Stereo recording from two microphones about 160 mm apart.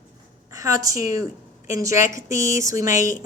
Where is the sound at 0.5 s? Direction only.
20° right (ahead or behind).